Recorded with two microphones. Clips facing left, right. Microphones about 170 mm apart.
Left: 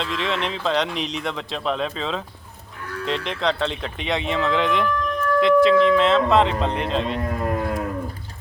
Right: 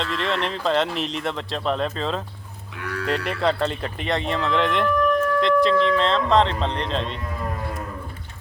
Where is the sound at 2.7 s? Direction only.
75° right (ahead or behind).